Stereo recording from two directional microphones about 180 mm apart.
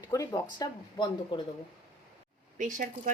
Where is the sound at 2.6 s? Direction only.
45° right (ahead or behind).